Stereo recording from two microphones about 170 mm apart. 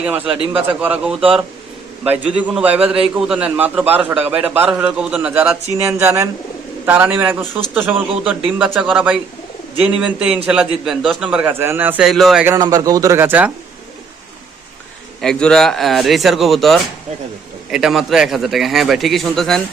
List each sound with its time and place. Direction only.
0.0 s a man's voice: 10° right (ahead or behind)
12.5 s speech: 20° right (ahead or behind)
15.2 s a man's voice: 5° left (ahead or behind)